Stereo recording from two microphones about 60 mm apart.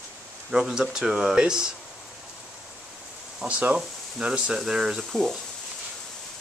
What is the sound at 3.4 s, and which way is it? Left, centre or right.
Speech, right.